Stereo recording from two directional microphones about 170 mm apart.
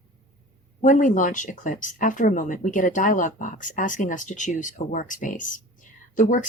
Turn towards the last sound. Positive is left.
turn(degrees=50)  # may be behind; listen again after turning